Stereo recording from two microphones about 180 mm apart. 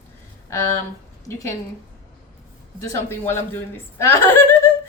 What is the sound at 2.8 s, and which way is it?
A man's voice, 15° left (ahead or behind).